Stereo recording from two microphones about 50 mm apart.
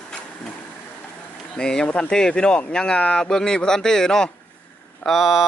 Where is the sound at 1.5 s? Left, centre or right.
Centre.